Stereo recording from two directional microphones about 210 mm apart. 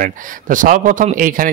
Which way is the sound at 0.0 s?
40° right (ahead or behind).